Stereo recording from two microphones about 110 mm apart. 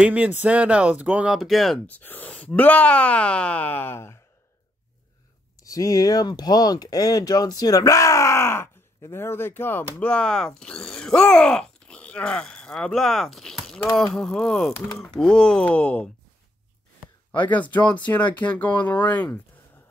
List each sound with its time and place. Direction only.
0.0 s speech: 15° right (ahead or behind)
1.9 s speech: 15° left (ahead or behind)
5.6 s speech: 30° left (ahead or behind); by 16.1 s 10° left (ahead or behind)
17.3 s speech: 15° left (ahead or behind)